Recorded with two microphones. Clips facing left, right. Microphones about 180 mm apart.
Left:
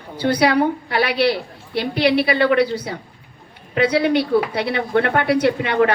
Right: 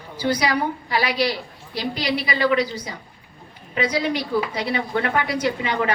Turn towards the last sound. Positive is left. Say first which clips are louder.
# left 6 dB
turn(degrees=65)  # may be behind; listen again after turning